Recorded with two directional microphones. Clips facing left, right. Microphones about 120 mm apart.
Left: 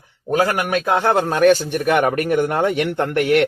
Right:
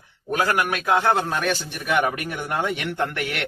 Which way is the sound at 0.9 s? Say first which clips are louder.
Left 4 dB; 50° left (ahead or behind).